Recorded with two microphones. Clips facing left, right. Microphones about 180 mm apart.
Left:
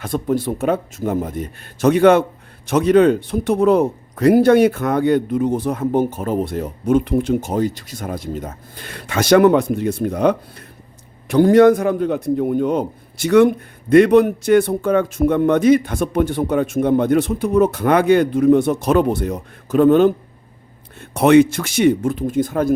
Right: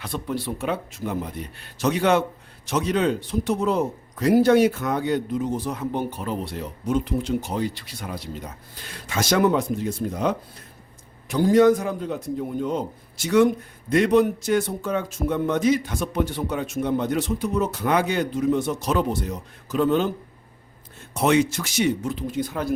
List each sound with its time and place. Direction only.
0.0 s speech: 45° left (ahead or behind)